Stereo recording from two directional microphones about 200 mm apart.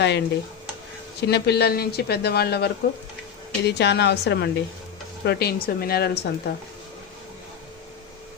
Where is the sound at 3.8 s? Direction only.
60° left (ahead or behind).